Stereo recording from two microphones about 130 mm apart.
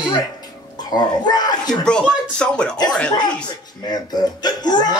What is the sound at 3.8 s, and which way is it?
Speech, 30° left (ahead or behind).